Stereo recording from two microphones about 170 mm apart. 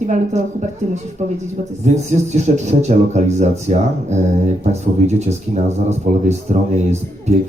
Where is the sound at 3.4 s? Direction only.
40° right (ahead or behind).